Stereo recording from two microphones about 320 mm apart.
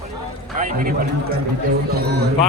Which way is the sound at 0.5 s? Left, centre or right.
Right.